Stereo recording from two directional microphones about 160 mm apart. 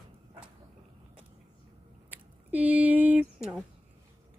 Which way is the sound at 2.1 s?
10° right (ahead or behind).